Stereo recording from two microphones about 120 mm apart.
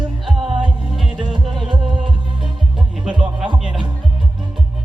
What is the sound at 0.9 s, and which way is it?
Music, 5° right (ahead or behind).